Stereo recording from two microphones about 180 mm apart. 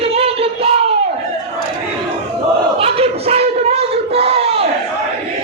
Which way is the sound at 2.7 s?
35° right (ahead or behind).